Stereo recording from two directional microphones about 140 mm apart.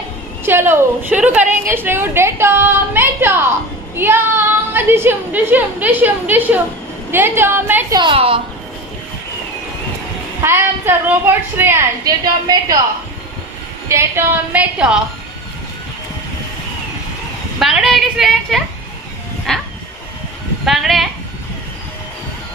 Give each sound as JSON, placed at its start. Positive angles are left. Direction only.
{"t": 0.5, "sound": "a woman's voice", "side_deg": -15}
{"t": 3.9, "sound": "child singing", "side_deg": -15}
{"t": 4.7, "sound": "a woman's voice", "side_deg": -15}
{"t": 7.9, "sound": "a woman's voice", "side_deg": -35}
{"t": 10.4, "sound": "a woman's voice", "side_deg": -15}
{"t": 13.8, "sound": "a woman's voice", "side_deg": -20}
{"t": 17.6, "sound": "a woman's voice", "side_deg": 0}
{"t": 19.5, "sound": "train", "side_deg": 5}
{"t": 20.6, "sound": "speech", "side_deg": 0}